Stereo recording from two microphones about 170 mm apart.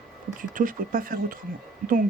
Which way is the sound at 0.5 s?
55° right (ahead or behind).